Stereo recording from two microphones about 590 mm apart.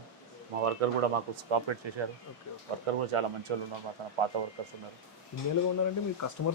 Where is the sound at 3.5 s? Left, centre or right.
Right.